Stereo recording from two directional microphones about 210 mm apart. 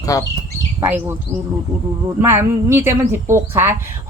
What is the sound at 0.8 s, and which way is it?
Speech, 10° right (ahead or behind).